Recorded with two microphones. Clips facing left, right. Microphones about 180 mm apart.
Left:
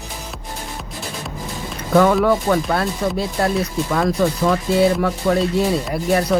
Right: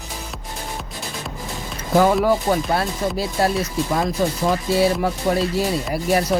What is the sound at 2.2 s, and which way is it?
Speech, 30° right (ahead or behind).